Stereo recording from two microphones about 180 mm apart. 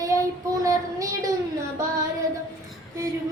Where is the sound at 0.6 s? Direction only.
20° right (ahead or behind).